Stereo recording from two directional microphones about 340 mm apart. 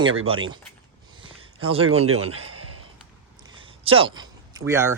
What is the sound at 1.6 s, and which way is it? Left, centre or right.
Speech, centre.